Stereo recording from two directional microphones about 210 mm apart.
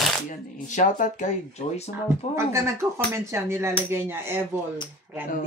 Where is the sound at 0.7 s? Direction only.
35° left (ahead or behind).